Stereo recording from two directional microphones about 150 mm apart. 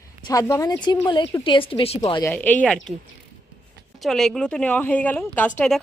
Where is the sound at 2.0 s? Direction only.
20° left (ahead or behind).